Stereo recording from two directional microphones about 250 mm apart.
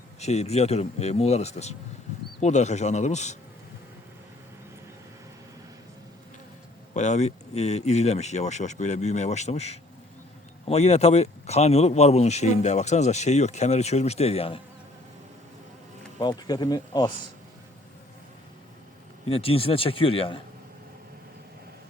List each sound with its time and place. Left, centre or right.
0.2 s speech: left
6.9 s speech: left
16.1 s speech: centre
19.3 s speech: left